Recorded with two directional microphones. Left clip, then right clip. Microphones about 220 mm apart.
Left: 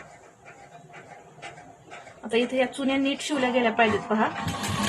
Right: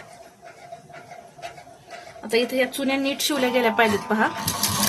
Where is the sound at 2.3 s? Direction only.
45° right (ahead or behind).